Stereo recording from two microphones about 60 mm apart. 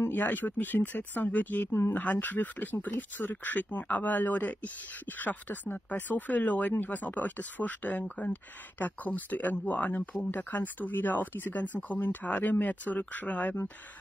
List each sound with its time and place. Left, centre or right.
0.0 s speech: left
1.7 s speech: left
2.0 s speech: left